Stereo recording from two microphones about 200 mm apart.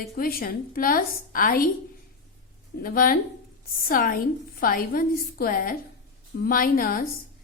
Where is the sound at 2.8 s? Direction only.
45° left (ahead or behind).